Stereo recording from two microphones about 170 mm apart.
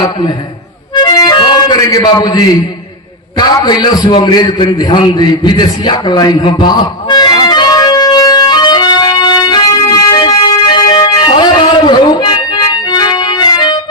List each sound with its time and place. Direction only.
1.0 s music: 25° left (ahead or behind)
3.3 s a sound: 25° left (ahead or behind)
12.9 s organ: 25° left (ahead or behind)